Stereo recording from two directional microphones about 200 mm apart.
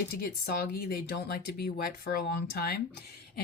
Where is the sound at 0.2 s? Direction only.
50° left (ahead or behind).